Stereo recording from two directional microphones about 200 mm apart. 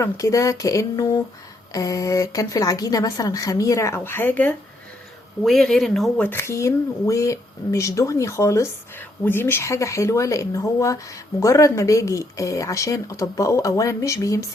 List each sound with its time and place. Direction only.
0.0 s speech: 15° left (ahead or behind)